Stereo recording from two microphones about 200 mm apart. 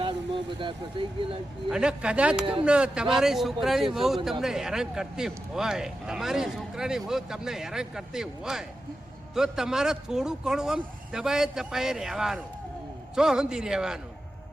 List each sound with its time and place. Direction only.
0.0 s speech: 25° right (ahead or behind)
1.7 s a man's voice: 5° right (ahead or behind)